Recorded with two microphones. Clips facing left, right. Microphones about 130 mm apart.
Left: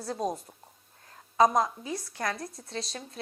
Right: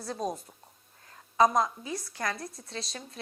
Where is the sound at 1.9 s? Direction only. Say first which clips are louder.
Left 1 dB; 25° left (ahead or behind).